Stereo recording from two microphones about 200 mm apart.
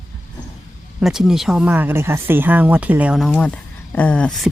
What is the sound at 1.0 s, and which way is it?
Speech, centre (ahead or behind).